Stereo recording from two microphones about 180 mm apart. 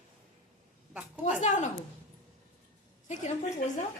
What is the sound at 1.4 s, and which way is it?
Speech, 40° left (ahead or behind).